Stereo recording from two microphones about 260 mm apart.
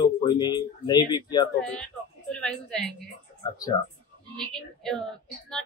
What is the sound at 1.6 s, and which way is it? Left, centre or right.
A woman's voice, centre.